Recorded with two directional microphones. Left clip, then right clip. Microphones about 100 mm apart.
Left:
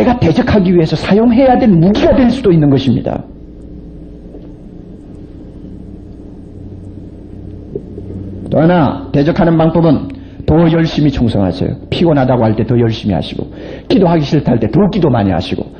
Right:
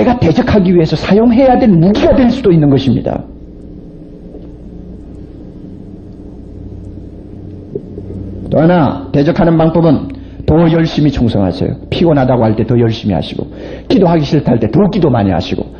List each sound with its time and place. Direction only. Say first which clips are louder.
0.0 s a man's voice: right 1 dB; 50° right (ahead or behind)
8.5 s a man's voice: right 1 dB; 50° right (ahead or behind)